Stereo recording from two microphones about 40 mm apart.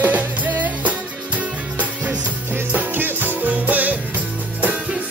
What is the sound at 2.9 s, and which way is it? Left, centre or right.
Music, right.